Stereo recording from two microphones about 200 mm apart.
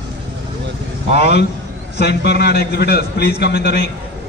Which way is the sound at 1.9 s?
55° left (ahead or behind).